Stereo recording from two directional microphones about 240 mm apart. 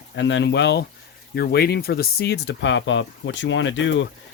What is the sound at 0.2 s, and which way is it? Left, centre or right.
Speech, left.